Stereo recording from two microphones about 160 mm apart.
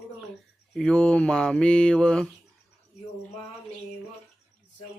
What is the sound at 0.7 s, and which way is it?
Mantra, 5° left (ahead or behind).